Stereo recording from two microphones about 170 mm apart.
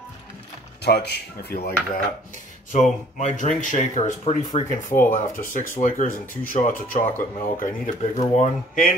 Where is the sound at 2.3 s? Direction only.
45° left (ahead or behind).